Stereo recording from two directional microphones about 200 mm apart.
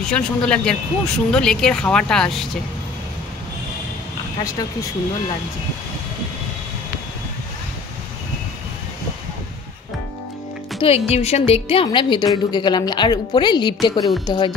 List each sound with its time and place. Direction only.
0.0 s speech: 5° left (ahead or behind)
10.8 s a woman's voice: 30° left (ahead or behind)